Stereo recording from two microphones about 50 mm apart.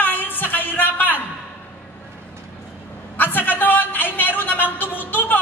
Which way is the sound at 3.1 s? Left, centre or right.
Left.